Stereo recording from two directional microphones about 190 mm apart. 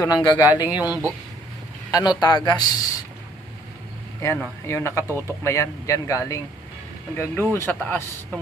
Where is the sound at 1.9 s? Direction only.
20° left (ahead or behind).